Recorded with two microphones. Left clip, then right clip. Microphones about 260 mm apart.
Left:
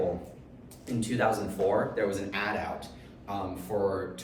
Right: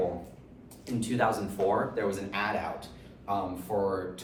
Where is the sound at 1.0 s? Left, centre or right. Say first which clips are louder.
Even; centre.